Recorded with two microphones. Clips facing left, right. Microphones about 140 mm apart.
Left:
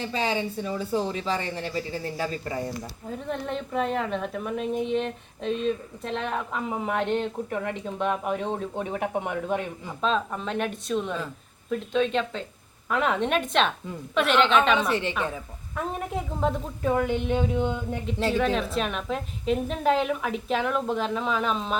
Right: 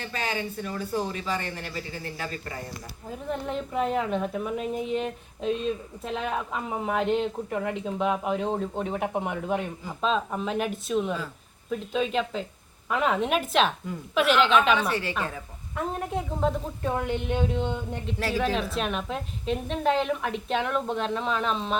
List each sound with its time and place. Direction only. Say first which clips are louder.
0.0 s speech: left 4 dB; 30° left (ahead or behind)
3.1 s a woman's voice: even; 5° right (ahead or behind)